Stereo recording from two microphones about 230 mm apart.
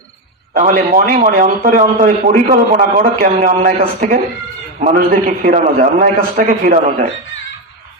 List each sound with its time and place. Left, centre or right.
0.5 s speech: right